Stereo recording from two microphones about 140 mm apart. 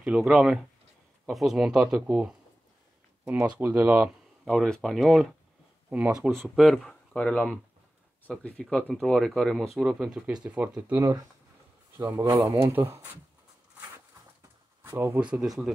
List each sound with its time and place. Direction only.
0.0 s speech: 10° right (ahead or behind)
4.5 s speech: 5° left (ahead or behind)
6.5 s speech: centre (ahead or behind); by 13.2 s 15° right (ahead or behind)
14.8 s speech: 15° right (ahead or behind)
15.3 s speech: centre (ahead or behind)